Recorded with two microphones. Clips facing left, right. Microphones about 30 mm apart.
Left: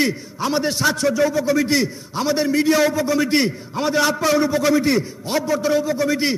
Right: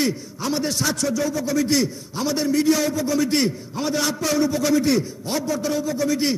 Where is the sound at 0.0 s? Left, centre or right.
Left.